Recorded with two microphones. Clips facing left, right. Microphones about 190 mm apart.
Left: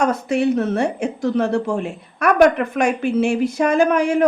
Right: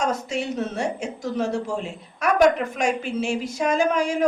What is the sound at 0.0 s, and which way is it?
Speech, 60° left (ahead or behind).